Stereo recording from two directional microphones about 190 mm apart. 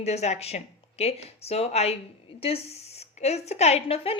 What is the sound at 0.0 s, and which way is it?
Speech, 35° left (ahead or behind).